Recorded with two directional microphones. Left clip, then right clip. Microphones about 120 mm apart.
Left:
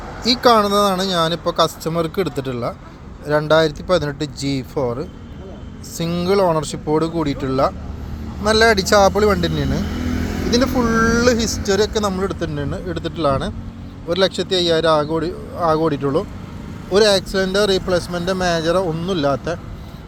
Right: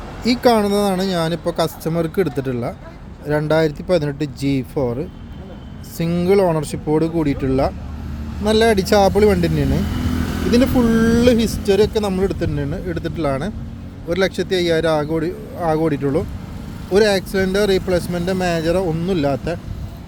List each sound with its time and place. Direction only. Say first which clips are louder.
0.3 s speech: left 2 dB; 55° right (ahead or behind)
6.0 s speech: right 1 dB; 70° right (ahead or behind)
10.8 s speech: even; 70° right (ahead or behind); by 19.5 s 40° right (ahead or behind)